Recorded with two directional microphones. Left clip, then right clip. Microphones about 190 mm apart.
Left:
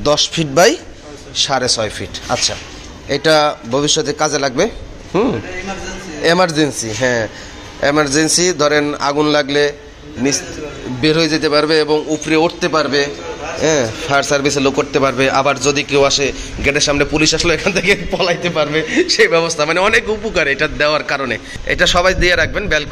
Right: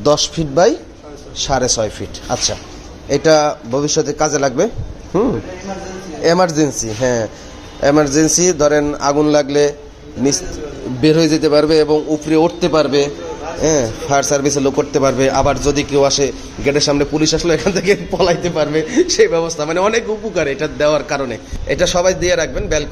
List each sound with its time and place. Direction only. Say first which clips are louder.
0.0 s a man's voice: even; 25° right (ahead or behind)
1.3 s a man's voice: left 1 dB; 10° right (ahead or behind)
11.0 s a man's voice: right 1 dB; 25° right (ahead or behind)
13.6 s a man's voice: even; 15° right (ahead or behind)
19.0 s a man's voice: left 1 dB; 5° right (ahead or behind)